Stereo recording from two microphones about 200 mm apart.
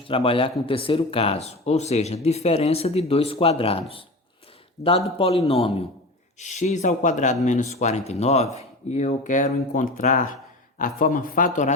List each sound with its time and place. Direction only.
0.1 s a man's voice: 25° left (ahead or behind)